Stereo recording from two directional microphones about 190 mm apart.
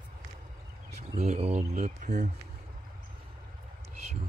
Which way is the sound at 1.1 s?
35° right (ahead or behind).